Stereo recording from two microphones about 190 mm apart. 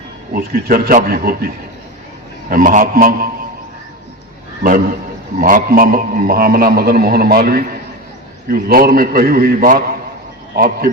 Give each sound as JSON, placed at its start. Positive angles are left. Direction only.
{"t": 0.3, "sound": "a man's voice", "side_deg": -50}
{"t": 4.6, "sound": "a man's voice", "side_deg": -45}